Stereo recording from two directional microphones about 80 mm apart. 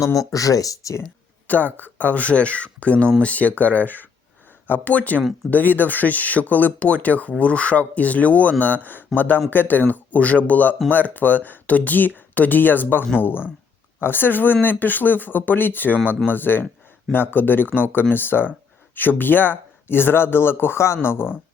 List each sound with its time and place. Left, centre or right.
0.0 s speech: left
1.5 s speech: left